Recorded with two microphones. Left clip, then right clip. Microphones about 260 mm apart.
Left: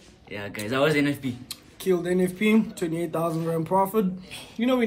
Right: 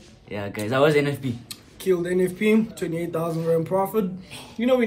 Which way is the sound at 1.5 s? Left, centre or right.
Centre.